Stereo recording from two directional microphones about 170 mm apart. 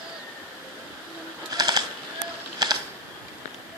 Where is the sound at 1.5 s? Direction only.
25° right (ahead or behind).